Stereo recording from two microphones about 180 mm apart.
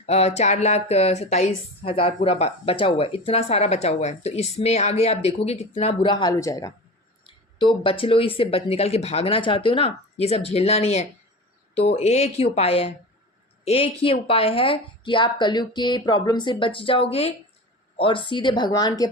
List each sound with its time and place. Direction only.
0.0 s speech: 35° left (ahead or behind); by 19.0 s 20° left (ahead or behind)